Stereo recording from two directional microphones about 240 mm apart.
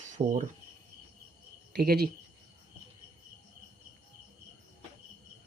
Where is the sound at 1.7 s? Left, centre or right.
Right.